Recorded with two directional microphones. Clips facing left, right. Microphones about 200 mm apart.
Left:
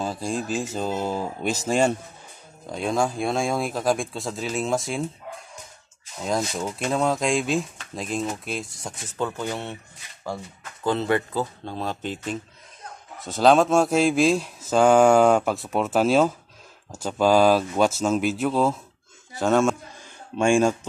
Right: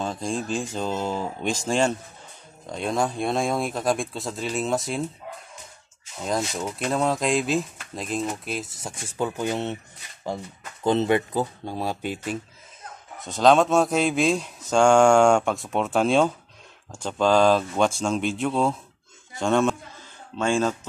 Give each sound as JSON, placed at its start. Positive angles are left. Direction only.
{"t": 0.0, "sound": "speech", "side_deg": 5}
{"t": 6.2, "sound": "speech", "side_deg": 0}
{"t": 13.2, "sound": "speech", "side_deg": 0}
{"t": 20.3, "sound": "speech", "side_deg": 15}